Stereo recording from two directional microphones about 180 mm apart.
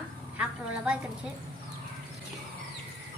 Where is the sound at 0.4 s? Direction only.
5° right (ahead or behind).